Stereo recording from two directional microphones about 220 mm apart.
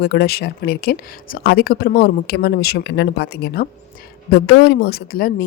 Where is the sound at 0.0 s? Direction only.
45° left (ahead or behind).